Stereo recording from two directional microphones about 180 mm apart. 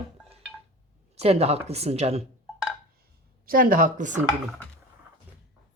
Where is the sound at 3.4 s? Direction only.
50° right (ahead or behind).